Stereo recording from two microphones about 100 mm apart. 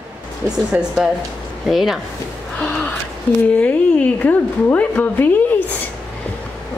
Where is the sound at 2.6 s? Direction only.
15° left (ahead or behind).